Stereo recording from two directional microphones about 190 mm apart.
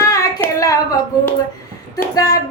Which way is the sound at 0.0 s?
15° left (ahead or behind).